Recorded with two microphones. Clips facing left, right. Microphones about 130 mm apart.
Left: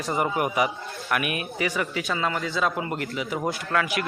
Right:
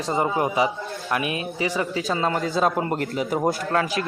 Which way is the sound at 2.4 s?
45° right (ahead or behind).